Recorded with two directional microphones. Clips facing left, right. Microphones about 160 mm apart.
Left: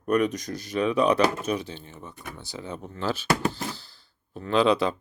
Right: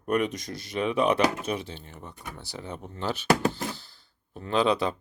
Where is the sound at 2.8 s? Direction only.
20° right (ahead or behind).